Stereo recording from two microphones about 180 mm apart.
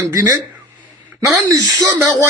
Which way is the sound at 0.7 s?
15° right (ahead or behind).